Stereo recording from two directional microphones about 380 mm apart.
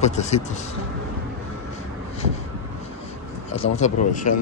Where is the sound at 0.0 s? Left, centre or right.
Centre.